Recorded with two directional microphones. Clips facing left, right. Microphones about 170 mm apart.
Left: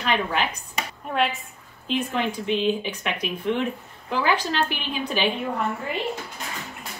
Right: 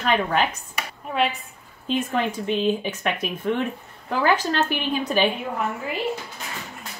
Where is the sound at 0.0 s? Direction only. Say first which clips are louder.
Right 3 dB; 45° right (ahead or behind).